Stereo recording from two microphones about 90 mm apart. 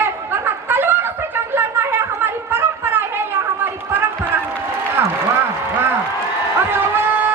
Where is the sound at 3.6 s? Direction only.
25° right (ahead or behind).